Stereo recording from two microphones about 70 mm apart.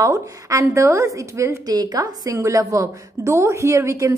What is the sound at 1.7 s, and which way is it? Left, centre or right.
A woman's voice, right.